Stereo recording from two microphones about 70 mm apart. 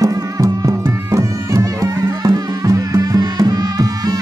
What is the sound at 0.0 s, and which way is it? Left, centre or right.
Music, right.